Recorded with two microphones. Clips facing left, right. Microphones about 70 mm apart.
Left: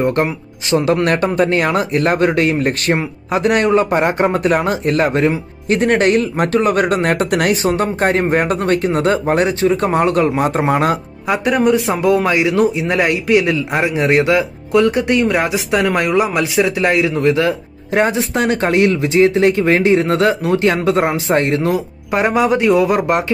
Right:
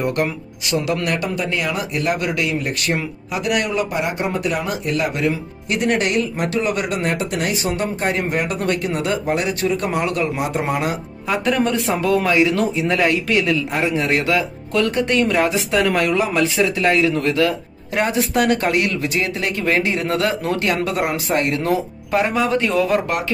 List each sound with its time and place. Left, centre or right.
0.0 s speech: left
7.6 s speech: left
11.2 s speech: centre